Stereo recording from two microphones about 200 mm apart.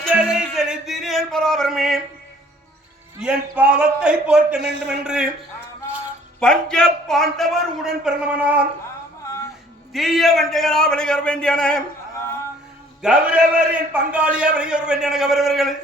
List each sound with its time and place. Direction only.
0.0 s music: 5° right (ahead or behind)
3.2 s a man's voice: 5° right (ahead or behind)
4.6 s a man's voice: 60° right (ahead or behind)
5.0 s a man's voice: 5° right (ahead or behind)
6.4 s a man's voice: 5° left (ahead or behind)
9.9 s a man's voice: centre (ahead or behind)
13.0 s a man's voice: 5° right (ahead or behind)